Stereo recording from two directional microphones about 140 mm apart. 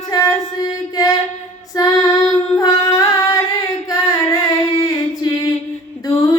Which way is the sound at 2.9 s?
25° left (ahead or behind).